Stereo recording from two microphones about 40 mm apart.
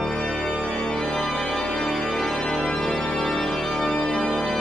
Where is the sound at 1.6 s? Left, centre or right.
Centre.